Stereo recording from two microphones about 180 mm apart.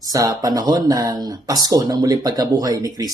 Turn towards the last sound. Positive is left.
turn(degrees=-20)  # may be behind; listen again after turning